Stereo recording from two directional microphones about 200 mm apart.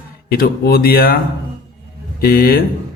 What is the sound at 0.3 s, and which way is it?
Speech, 50° left (ahead or behind).